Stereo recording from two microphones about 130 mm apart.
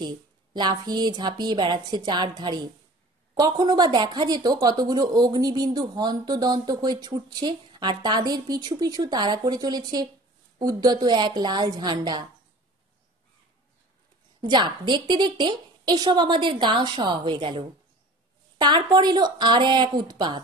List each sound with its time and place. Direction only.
0.0 s speech: 35° right (ahead or behind)
14.4 s speech: 35° right (ahead or behind)